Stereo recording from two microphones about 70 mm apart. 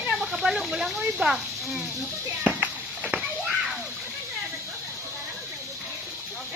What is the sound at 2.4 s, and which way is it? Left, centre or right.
Children playing, right.